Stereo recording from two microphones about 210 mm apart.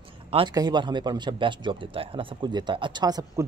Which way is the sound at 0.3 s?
20° right (ahead or behind).